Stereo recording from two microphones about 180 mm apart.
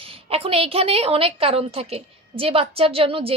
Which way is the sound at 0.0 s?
30° right (ahead or behind).